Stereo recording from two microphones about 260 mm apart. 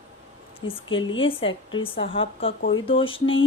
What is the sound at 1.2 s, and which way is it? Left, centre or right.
Speech, left.